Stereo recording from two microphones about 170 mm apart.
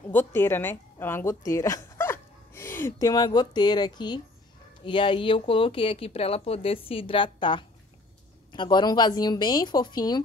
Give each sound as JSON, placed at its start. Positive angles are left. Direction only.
{"t": 0.1, "sound": "a woman's voice", "side_deg": 10}